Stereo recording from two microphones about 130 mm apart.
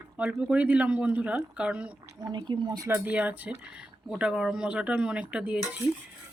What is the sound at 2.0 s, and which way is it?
Speech, 30° right (ahead or behind).